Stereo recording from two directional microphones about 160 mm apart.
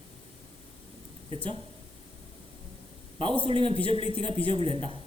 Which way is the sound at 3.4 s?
35° right (ahead or behind).